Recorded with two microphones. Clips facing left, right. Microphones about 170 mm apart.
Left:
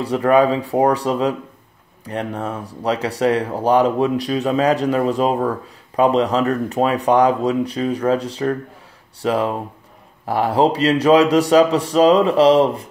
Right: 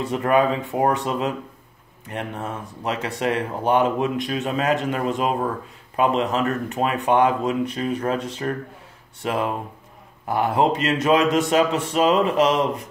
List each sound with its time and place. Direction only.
0.0 s speech: 35° left (ahead or behind)